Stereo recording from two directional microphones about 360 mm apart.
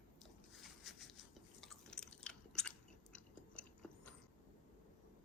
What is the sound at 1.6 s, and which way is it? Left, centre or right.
Chewing, centre.